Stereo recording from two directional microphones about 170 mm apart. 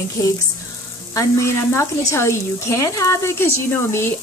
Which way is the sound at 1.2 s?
15° left (ahead or behind).